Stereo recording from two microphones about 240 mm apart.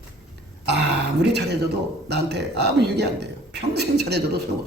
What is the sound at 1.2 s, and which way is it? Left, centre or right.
A man's voice, right.